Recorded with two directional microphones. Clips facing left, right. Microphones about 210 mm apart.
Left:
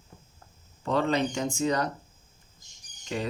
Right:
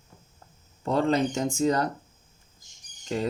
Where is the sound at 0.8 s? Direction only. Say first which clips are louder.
Right 2 dB; 40° right (ahead or behind).